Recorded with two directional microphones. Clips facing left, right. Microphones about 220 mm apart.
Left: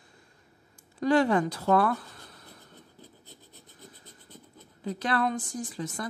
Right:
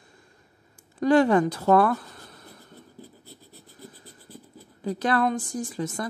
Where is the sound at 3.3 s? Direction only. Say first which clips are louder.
Right 4 dB; 15° left (ahead or behind).